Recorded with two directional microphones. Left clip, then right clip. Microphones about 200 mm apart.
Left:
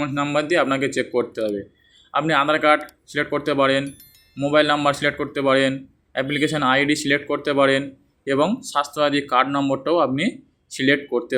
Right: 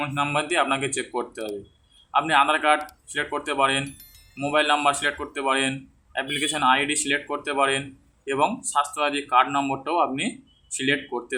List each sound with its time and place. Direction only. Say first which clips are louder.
0.0 s speech: left 3 dB; 20° left (ahead or behind)